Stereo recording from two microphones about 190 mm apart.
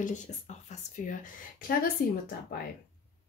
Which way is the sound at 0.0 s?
40° left (ahead or behind).